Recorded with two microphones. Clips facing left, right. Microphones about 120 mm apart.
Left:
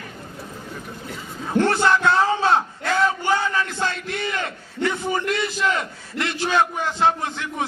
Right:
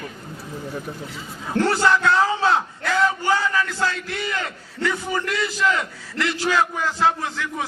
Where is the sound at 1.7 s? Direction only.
20° left (ahead or behind).